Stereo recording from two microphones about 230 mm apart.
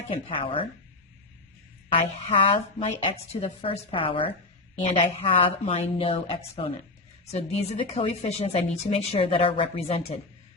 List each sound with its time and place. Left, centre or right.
0.1 s a woman's voice: left
1.9 s a woman's voice: left